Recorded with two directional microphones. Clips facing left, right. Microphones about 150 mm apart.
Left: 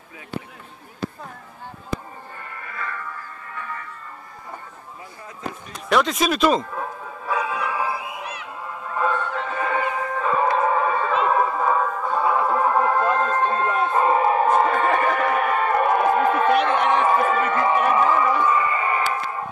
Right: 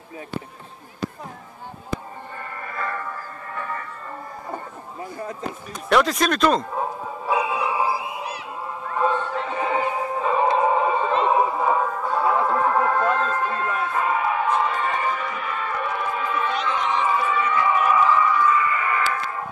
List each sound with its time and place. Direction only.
2.3 s music: 40° right (ahead or behind)
5.9 s speech: centre (ahead or behind)
6.7 s music: 25° right (ahead or behind)
7.8 s a sound: 35° right (ahead or behind)
8.9 s music: 25° right (ahead or behind); by 12.3 s 5° right (ahead or behind)
12.3 s music: 10° left (ahead or behind)
13.4 s music: 30° left (ahead or behind)
18.4 s a sound: 30° left (ahead or behind)